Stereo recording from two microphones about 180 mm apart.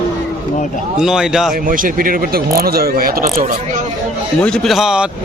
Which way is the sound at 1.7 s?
50° right (ahead or behind).